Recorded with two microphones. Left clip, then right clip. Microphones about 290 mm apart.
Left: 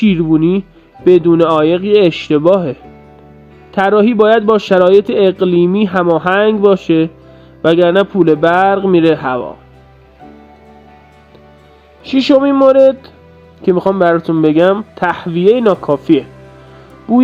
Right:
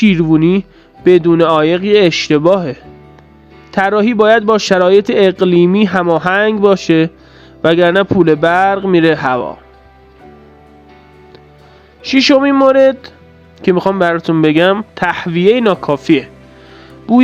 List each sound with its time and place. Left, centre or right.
0.0 s speech: right
12.0 s speech: centre